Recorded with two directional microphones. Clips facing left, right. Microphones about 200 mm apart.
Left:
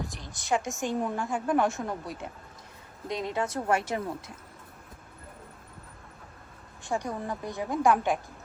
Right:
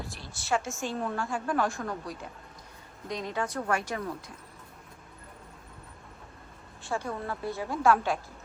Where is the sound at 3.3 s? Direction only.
25° left (ahead or behind).